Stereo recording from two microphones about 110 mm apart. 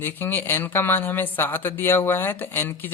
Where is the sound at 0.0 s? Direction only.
20° left (ahead or behind).